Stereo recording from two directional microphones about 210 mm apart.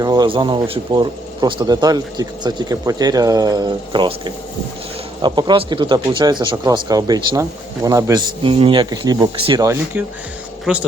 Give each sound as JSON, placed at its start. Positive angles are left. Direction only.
{"t": 0.0, "sound": "speech", "side_deg": -20}